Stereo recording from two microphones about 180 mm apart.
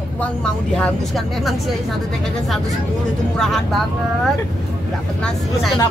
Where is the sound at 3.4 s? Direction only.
Centre (ahead or behind).